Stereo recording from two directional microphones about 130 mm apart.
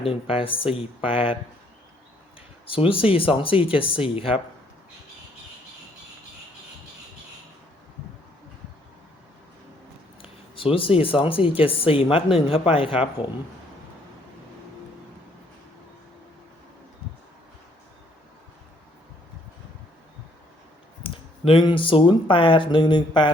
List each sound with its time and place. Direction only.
0.0 s speech: 45° left (ahead or behind)
2.6 s speech: 45° left (ahead or behind)
10.2 s speech: 45° left (ahead or behind)
21.0 s speech: 45° left (ahead or behind)